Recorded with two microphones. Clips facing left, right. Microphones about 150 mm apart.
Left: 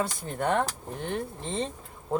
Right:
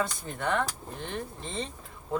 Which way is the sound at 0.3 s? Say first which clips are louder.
Left 3 dB; 40° left (ahead or behind).